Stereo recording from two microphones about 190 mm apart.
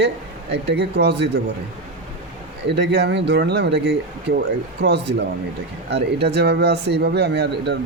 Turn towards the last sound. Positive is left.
turn(degrees=-60)  # may be behind; listen again after turning